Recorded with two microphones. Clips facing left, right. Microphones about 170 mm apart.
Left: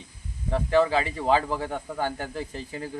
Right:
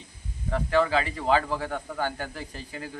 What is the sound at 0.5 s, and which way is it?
Speech, 25° left (ahead or behind).